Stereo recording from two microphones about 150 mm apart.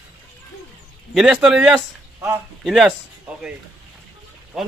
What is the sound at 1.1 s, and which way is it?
Speech, 5° right (ahead or behind).